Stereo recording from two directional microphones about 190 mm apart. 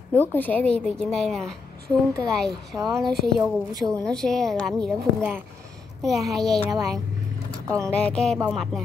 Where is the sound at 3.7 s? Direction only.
20° right (ahead or behind).